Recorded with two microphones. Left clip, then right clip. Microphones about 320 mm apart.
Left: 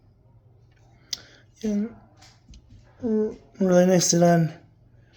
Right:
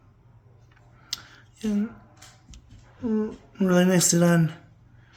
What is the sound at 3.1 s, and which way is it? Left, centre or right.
Speech, centre.